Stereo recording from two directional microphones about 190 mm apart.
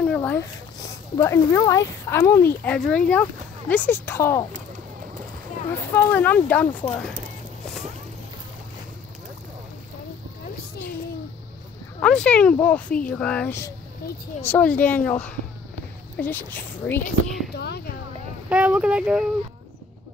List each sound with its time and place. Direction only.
0.0 s a sound: 5° left (ahead or behind)
1.1 s speech: 15° left (ahead or behind)
5.9 s speech: 10° left (ahead or behind)
12.0 s speech: 5° left (ahead or behind)
14.0 s speech: 55° left (ahead or behind)
14.4 s speech: 10° left (ahead or behind)
18.5 s speech: 5° right (ahead or behind)